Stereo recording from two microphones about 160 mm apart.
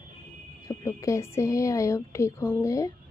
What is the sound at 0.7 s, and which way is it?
A woman's voice, 20° left (ahead or behind).